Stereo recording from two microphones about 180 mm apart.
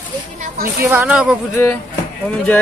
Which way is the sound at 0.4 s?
55° right (ahead or behind).